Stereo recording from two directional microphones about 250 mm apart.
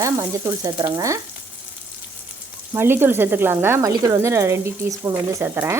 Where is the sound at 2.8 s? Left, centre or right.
Centre.